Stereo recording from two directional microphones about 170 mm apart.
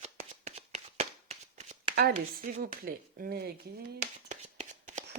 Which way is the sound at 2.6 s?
55° right (ahead or behind).